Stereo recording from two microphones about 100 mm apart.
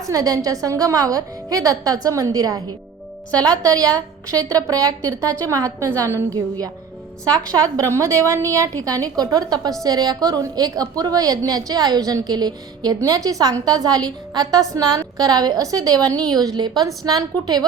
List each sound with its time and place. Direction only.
0.1 s a woman's voice: 40° right (ahead or behind)